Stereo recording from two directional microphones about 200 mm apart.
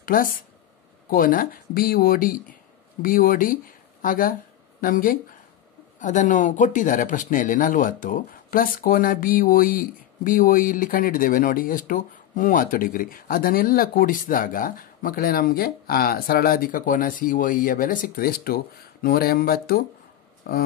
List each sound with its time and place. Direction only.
0.0 s speech: 45° left (ahead or behind)